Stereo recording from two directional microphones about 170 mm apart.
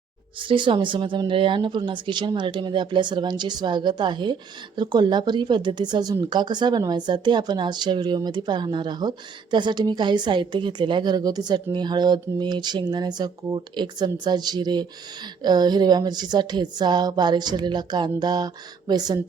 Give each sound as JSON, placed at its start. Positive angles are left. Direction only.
{"t": 0.3, "sound": "speech", "side_deg": -30}